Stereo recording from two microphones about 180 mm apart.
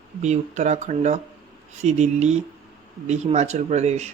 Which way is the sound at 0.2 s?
40° right (ahead or behind).